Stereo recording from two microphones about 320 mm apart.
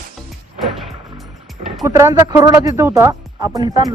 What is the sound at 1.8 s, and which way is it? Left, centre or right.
Speech, centre.